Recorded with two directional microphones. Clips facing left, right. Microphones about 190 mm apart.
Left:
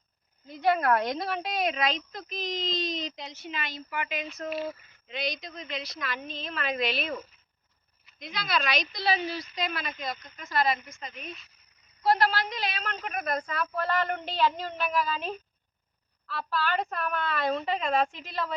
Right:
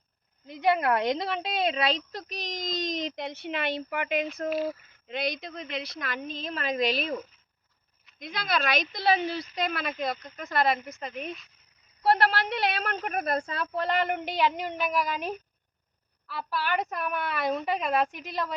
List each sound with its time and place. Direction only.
0.4 s a woman's voice: 15° right (ahead or behind); by 4.4 s 55° right (ahead or behind)
4.4 s speech: centre (ahead or behind)
5.0 s a woman's voice: 55° right (ahead or behind)
8.2 s a woman's voice: 50° right (ahead or behind); by 18.5 s 10° right (ahead or behind)